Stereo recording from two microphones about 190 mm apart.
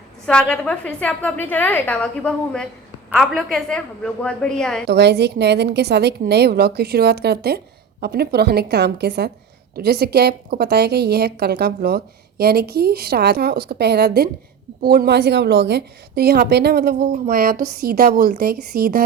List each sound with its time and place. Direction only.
0.3 s a woman's voice: 5° left (ahead or behind)
4.9 s a woman's voice: 60° right (ahead or behind)